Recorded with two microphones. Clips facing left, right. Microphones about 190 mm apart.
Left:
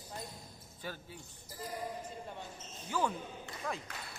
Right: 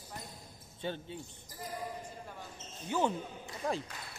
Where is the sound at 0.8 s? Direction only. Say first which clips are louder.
Right 6 dB; 25° right (ahead or behind).